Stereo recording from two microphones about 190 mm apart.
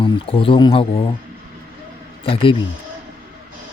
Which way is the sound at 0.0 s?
30° left (ahead or behind).